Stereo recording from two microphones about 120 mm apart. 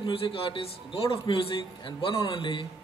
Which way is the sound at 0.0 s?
50° left (ahead or behind).